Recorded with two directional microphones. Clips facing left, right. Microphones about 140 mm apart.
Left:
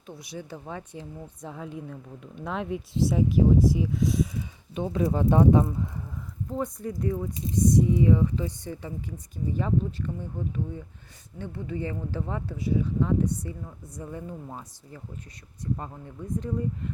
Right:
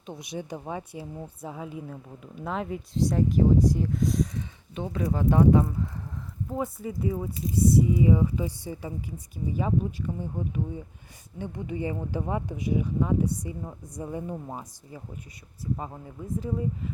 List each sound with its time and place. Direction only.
0.0 s speech: 20° right (ahead or behind); by 4.4 s 5° left (ahead or behind)
4.7 s speech: 20° left (ahead or behind)
6.5 s speech: 5° right (ahead or behind)